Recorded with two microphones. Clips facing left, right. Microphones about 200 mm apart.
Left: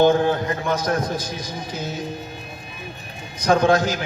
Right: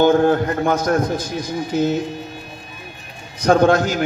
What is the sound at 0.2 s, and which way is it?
Speech, 50° right (ahead or behind).